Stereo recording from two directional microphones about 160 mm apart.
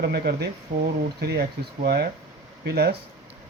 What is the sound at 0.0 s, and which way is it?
Speech, 80° right.